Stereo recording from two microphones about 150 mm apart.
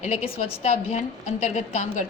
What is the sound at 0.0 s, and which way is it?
A woman's voice, 45° left (ahead or behind).